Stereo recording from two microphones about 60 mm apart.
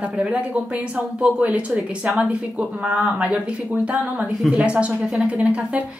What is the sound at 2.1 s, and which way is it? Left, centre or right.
A woman's voice, centre.